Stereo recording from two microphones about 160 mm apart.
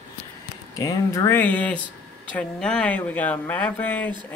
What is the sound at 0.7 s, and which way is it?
Speech, 20° left (ahead or behind).